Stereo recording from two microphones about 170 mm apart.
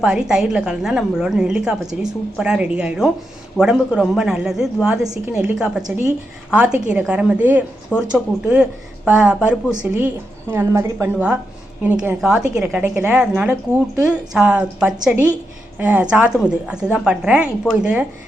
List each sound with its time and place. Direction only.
0.0 s a woman's voice: 5° right (ahead or behind)